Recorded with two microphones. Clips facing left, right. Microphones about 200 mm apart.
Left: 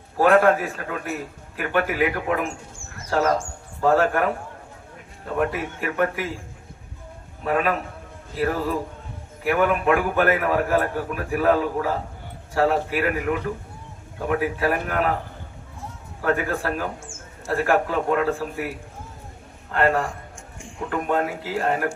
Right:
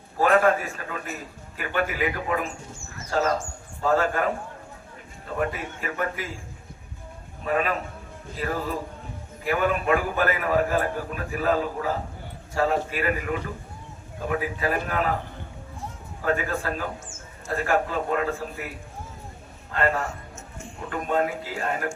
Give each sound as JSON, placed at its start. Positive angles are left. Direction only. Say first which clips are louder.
{"t": 0.2, "sound": "a man's voice", "louder": "left 3 dB", "side_deg": 65}
{"t": 7.4, "sound": "a man's voice", "louder": "left 3 dB", "side_deg": 60}
{"t": 16.2, "sound": "a man's voice", "louder": "left 3 dB", "side_deg": 60}
{"t": 19.7, "sound": "a man's voice", "louder": "left 4 dB", "side_deg": 60}